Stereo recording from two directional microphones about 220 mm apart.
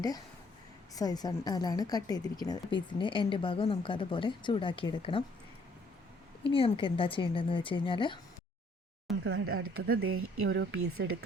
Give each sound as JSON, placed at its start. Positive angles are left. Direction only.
{"t": 0.9, "sound": "speech", "side_deg": 15}
{"t": 6.5, "sound": "speech", "side_deg": 25}
{"t": 9.1, "sound": "a sound", "side_deg": 0}
{"t": 9.5, "sound": "speech", "side_deg": -70}